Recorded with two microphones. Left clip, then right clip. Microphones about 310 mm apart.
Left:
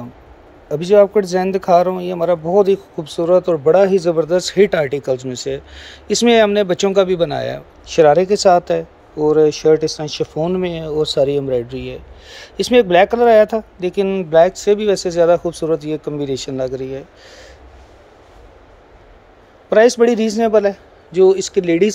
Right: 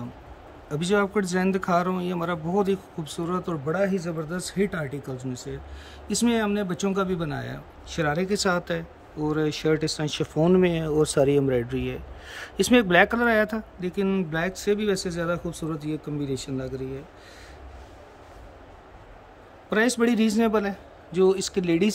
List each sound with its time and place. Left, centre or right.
0.7 s speech: centre
3.7 s speech: left
4.3 s speech: centre
19.7 s speech: centre